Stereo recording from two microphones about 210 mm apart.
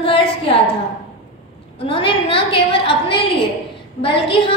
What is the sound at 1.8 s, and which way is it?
A woman's voice, 25° left (ahead or behind).